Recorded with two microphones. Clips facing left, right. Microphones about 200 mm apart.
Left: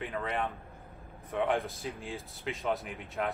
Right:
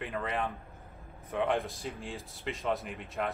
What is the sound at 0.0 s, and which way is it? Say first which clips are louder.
Speech: even; centre (ahead or behind).